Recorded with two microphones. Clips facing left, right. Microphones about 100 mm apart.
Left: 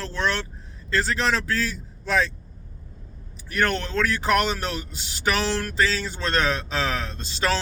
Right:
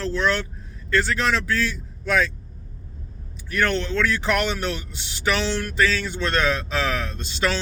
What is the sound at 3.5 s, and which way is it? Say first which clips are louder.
Speech: right 1 dB; 35° left (ahead or behind).